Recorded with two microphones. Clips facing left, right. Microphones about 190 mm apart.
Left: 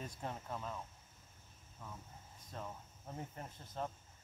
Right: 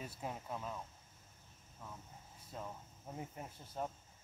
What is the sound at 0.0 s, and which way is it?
Speech, 5° right (ahead or behind).